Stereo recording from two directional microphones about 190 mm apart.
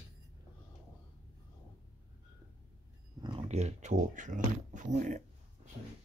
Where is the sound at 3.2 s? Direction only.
30° right (ahead or behind).